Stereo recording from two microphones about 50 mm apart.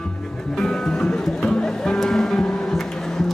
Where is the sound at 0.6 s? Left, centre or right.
Centre.